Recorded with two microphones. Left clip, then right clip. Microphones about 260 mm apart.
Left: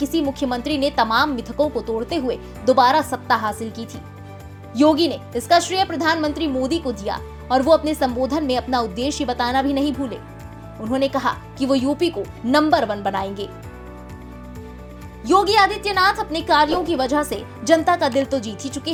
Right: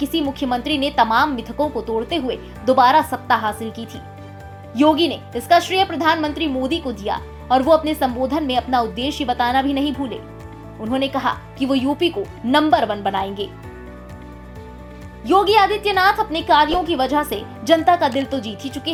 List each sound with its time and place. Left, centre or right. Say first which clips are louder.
0.0 s speech: even; left
15.2 s speech: right 1 dB; left